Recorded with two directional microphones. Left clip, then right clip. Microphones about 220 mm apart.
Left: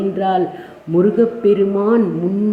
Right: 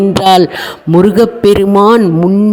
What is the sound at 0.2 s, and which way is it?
Speech, 50° right (ahead or behind).